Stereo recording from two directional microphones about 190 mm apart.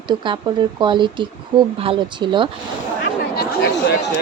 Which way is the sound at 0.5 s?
25° right (ahead or behind).